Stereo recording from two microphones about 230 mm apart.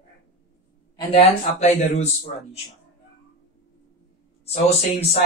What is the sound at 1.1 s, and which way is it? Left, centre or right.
Speech, left.